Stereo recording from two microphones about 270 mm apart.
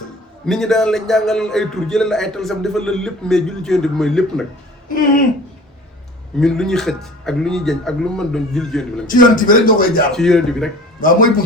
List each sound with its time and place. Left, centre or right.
0.4 s a man's voice: centre
4.9 s speech: left
6.3 s a man's voice: centre
9.1 s speech: left
10.2 s a man's voice: centre